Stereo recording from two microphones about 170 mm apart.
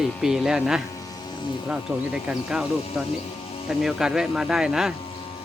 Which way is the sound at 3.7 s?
5° right (ahead or behind).